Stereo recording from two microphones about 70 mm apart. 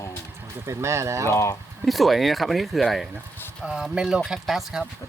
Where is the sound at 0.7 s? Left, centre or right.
Right.